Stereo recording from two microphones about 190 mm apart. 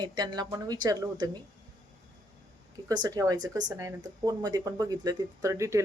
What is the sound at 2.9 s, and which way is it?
Speech, 20° right (ahead or behind).